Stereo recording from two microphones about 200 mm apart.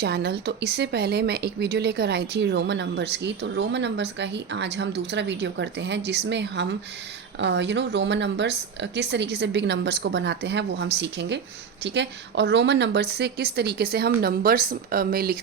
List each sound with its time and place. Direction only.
0.0 s a woman's voice: 55° right (ahead or behind)